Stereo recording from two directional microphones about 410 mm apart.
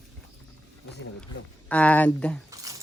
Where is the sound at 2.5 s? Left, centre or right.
Centre.